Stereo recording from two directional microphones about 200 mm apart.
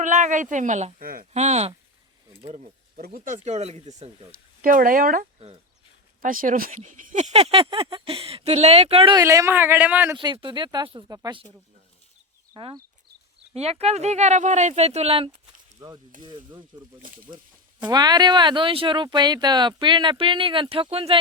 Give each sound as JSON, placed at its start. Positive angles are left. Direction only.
{"t": 0.0, "sound": "speech", "side_deg": -40}
{"t": 3.0, "sound": "speech", "side_deg": -45}
{"t": 4.3, "sound": "speech", "side_deg": -45}
{"t": 6.2, "sound": "speech", "side_deg": -40}
{"t": 9.2, "sound": "speech", "side_deg": -15}
{"t": 10.2, "sound": "speech", "side_deg": -25}
{"t": 12.5, "sound": "speech", "side_deg": -25}
{"t": 17.0, "sound": "speech", "side_deg": -45}
{"t": 17.8, "sound": "speech", "side_deg": -20}